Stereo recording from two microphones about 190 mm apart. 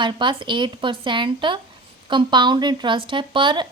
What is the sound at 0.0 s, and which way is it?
Speech, 25° right (ahead or behind).